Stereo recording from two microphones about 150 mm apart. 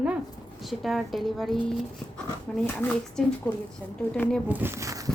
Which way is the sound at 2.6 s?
10° left (ahead or behind).